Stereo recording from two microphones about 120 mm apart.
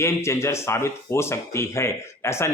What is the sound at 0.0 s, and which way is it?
Speech, 20° left (ahead or behind).